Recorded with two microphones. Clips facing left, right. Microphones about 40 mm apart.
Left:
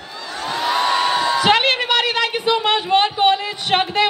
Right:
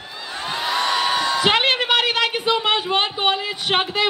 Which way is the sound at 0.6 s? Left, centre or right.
Centre.